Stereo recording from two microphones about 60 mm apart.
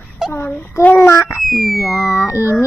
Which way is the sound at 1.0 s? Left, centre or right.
Left.